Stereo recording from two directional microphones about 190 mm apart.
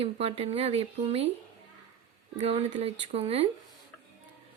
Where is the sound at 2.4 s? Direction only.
35° right (ahead or behind).